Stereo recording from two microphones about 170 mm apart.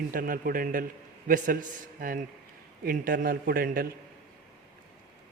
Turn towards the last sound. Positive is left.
turn(degrees=-60)  # may be behind; listen again after turning